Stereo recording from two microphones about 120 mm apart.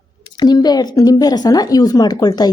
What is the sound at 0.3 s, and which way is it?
Speech, 35° left (ahead or behind).